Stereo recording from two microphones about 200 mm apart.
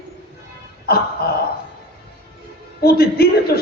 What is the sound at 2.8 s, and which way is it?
Speech, 50° left (ahead or behind).